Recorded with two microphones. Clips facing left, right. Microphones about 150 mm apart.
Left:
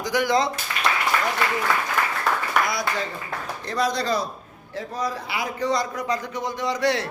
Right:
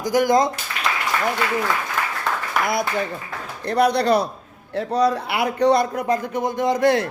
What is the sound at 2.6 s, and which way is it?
A man's voice, 55° right (ahead or behind).